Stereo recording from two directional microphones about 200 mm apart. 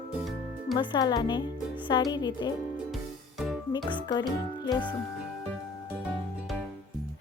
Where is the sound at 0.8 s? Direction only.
20° left (ahead or behind).